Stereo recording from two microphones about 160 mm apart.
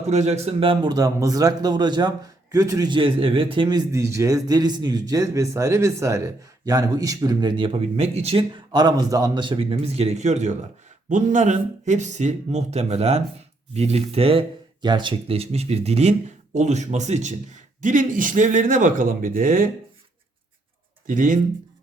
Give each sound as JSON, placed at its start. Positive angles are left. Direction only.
{"t": 0.1, "sound": "a man's voice", "side_deg": -45}
{"t": 8.7, "sound": "a man's voice", "side_deg": -25}
{"t": 21.1, "sound": "speech", "side_deg": -55}